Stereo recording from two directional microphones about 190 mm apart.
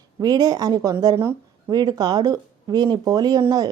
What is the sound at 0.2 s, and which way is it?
A woman's voice, 20° right (ahead or behind).